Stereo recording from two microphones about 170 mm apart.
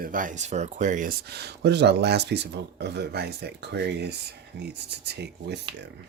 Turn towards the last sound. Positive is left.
turn(degrees=-75)  # may be behind; listen again after turning